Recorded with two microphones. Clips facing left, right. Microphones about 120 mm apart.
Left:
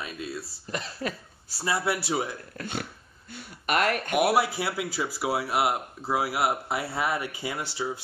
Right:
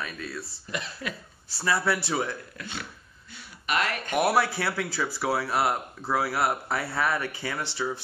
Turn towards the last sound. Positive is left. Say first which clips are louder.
# even
turn(degrees=15)  # may be behind; listen again after turning